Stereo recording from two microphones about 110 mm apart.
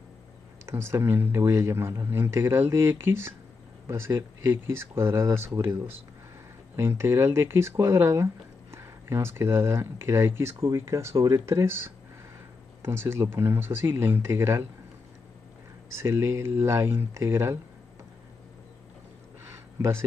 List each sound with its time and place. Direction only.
0.7 s speech: 25° right (ahead or behind)
16.0 s speech: 25° right (ahead or behind)
19.5 s a sound: 20° right (ahead or behind)